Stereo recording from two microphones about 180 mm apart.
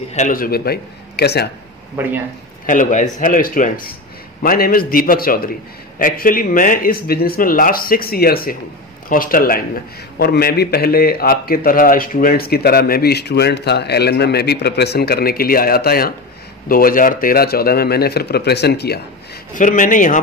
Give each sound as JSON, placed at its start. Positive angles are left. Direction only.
{"t": 0.1, "sound": "a man's voice", "side_deg": 45}
{"t": 2.0, "sound": "speech", "side_deg": -10}
{"t": 2.6, "sound": "a man's voice", "side_deg": 45}
{"t": 19.5, "sound": "a man's voice", "side_deg": 45}